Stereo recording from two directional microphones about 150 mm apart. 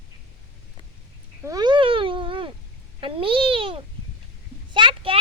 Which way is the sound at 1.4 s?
30° right (ahead or behind).